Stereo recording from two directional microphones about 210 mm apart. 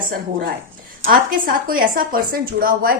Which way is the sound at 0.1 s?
45° right (ahead or behind).